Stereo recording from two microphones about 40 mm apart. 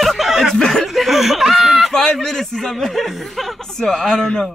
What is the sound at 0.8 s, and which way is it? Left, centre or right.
Snicker, centre.